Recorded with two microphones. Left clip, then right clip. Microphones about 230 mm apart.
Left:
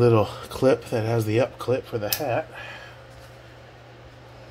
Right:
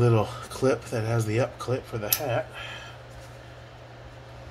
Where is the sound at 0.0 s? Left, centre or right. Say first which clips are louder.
Left 5 dB; left.